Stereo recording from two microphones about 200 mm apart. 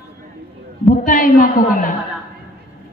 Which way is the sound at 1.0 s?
40° left (ahead or behind).